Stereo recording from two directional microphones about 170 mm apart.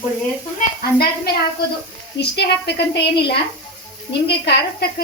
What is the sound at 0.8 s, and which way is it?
Speech, 65° left (ahead or behind).